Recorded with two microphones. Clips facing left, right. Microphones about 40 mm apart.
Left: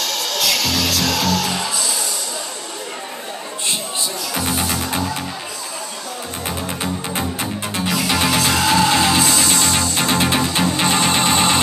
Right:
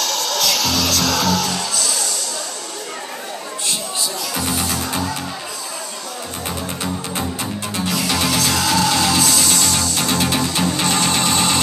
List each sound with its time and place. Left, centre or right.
0.0 s music: centre
1.5 s music: left
4.3 s music: left
7.7 s music: left